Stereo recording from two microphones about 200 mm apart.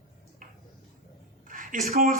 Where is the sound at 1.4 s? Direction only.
40° right (ahead or behind).